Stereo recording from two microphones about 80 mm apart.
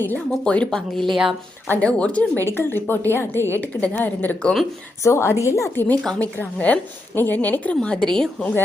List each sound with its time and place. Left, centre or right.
0.3 s a woman's voice: centre
1.1 s speech: centre
1.6 s a woman's voice: centre
2.4 s a woman's voice: left
5.0 s a woman's voice: left
6.1 s a woman's voice: centre